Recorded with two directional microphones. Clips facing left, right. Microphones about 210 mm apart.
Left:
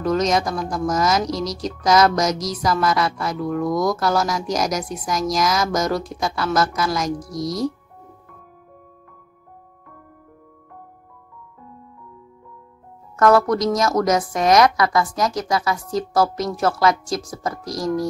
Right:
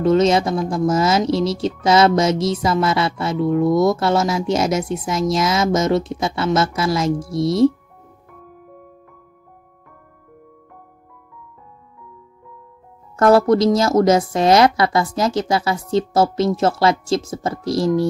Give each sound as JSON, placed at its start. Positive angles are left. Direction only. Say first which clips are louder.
{"t": 0.0, "sound": "speech", "louder": "right 5 dB", "side_deg": -25}
{"t": 13.1, "sound": "speech", "louder": "right 3 dB", "side_deg": -30}